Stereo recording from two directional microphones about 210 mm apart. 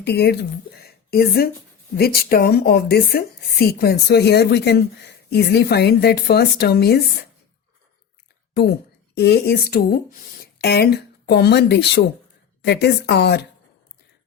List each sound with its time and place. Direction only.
0.0 s speech: 50° left (ahead or behind)
0.8 s a sound: 45° left (ahead or behind)
2.0 s speech: 45° left (ahead or behind)
9.1 s speech: 50° left (ahead or behind)